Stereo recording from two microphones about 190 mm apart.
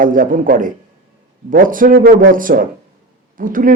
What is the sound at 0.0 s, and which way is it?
Speech, 45° right (ahead or behind).